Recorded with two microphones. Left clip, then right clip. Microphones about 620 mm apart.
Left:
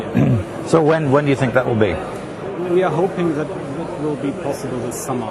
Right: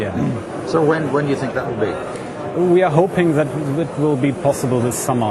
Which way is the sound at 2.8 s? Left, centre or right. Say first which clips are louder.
Even; right.